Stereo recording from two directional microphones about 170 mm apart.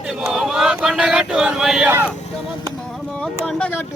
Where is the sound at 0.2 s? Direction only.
Centre (ahead or behind).